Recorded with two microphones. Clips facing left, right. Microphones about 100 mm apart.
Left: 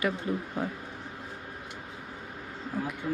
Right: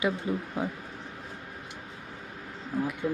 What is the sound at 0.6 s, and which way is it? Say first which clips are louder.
Speech: right 1 dB; 20° right (ahead or behind).